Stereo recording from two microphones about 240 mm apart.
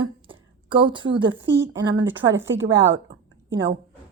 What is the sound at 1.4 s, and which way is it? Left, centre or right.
A woman's voice, right.